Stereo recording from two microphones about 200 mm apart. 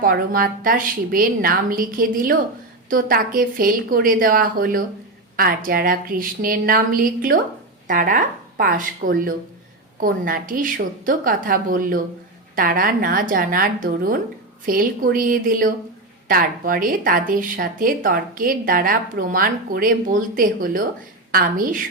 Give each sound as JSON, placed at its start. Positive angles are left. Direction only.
{"t": 0.0, "sound": "speech", "side_deg": -45}